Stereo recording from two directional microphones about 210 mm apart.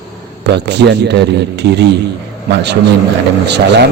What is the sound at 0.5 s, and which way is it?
A man's voice, 55° right (ahead or behind).